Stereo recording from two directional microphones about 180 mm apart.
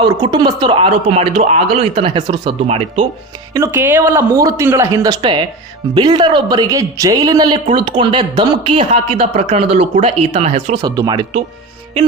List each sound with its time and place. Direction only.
0.0 s a man's voice: 25° right (ahead or behind)
3.5 s a man's voice: 15° right (ahead or behind); by 10.8 s 35° right (ahead or behind)
10.8 s a man's voice: 20° right (ahead or behind)